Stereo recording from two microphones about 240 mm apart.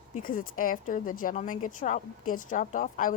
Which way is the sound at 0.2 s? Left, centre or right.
Left.